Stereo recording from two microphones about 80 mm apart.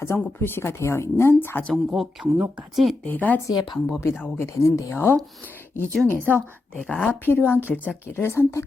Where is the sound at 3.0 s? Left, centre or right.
Left.